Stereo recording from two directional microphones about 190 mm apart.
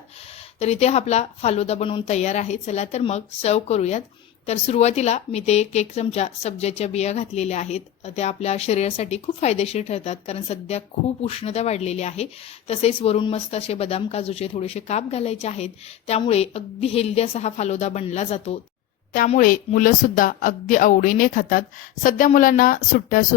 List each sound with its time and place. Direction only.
0.6 s a woman's voice: 35° left (ahead or behind)